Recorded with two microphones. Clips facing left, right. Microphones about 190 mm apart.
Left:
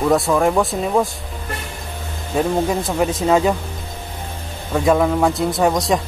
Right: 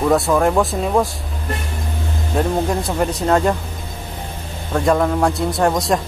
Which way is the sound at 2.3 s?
5° left (ahead or behind).